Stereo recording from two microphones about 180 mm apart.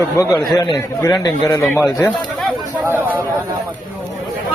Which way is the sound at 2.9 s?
10° right (ahead or behind).